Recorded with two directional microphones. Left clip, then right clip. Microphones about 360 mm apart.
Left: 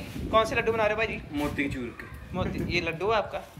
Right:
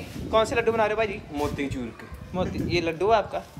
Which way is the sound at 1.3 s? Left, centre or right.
Centre.